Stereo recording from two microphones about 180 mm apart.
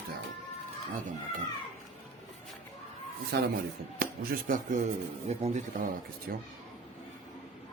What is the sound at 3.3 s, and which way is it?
Mantra, 60° right (ahead or behind).